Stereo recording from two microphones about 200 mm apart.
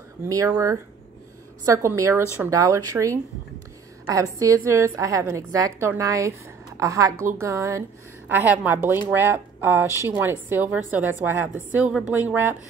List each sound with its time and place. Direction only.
0.3 s a woman's voice: 15° right (ahead or behind)